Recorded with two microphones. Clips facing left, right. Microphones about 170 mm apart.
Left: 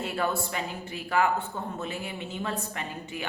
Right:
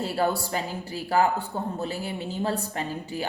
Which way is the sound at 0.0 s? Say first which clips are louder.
Right 4 dB; 35° right (ahead or behind).